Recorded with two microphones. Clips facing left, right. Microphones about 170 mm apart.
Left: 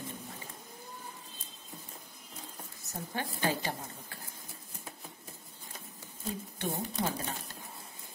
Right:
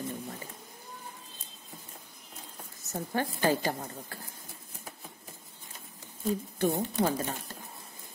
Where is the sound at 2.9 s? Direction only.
45° right (ahead or behind).